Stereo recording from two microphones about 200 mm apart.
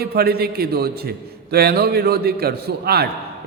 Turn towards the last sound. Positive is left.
turn(degrees=-50)  # may be behind; listen again after turning